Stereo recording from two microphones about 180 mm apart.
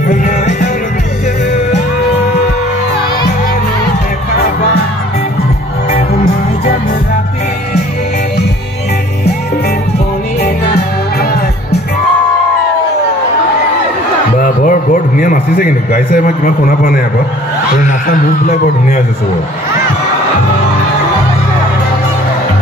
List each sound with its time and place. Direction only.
0.0 s music: 45° left (ahead or behind)
10.4 s music: 65° left (ahead or behind)
14.4 s a sound: 50° left (ahead or behind)
17.7 s speech: 50° left (ahead or behind)